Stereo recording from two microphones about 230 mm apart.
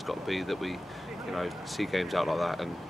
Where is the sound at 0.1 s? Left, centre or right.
Centre.